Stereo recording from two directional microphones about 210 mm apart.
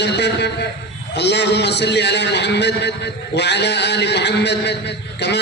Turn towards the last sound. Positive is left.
turn(degrees=55)  # may be behind; listen again after turning